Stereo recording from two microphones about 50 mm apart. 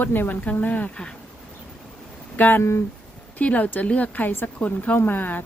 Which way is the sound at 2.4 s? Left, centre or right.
Left.